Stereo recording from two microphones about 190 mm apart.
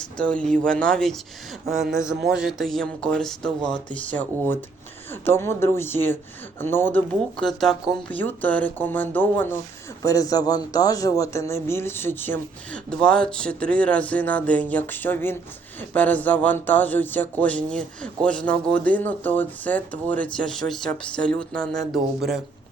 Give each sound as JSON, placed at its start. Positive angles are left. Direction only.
{"t": 0.0, "sound": "a man's voice", "side_deg": 5}